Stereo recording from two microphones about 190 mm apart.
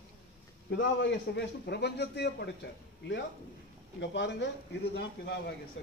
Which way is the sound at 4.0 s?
65° left (ahead or behind).